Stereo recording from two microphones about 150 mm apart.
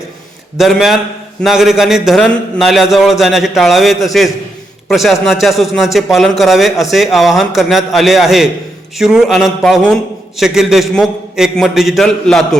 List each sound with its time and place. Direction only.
0.5 s a man's voice: centre (ahead or behind)